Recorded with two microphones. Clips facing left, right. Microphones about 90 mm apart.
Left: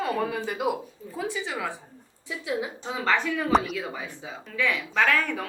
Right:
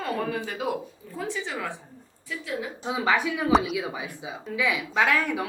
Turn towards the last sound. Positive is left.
turn(degrees=-10)  # may be behind; listen again after turning